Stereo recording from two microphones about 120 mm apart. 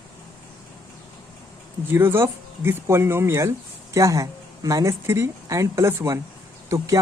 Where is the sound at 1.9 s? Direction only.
20° right (ahead or behind).